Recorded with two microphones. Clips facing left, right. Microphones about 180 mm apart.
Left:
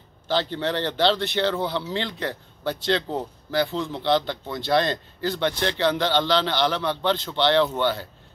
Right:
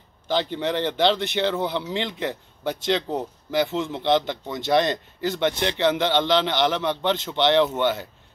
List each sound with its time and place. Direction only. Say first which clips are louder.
0.3 s speech: right 1 dB; 15° right (ahead or behind)